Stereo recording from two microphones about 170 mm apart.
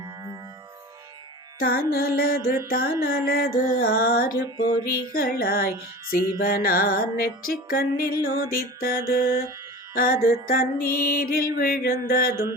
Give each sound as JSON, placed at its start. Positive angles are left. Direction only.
{"t": 1.5, "sound": "music", "side_deg": 60}
{"t": 4.5, "sound": "music", "side_deg": 25}
{"t": 4.9, "sound": "music", "side_deg": 60}